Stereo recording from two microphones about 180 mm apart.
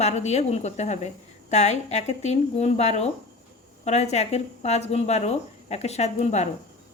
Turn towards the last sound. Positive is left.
turn(degrees=40)  # may be behind; listen again after turning